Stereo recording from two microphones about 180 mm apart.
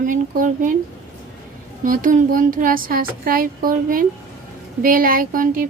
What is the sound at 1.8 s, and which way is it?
Speech, 50° right (ahead or behind).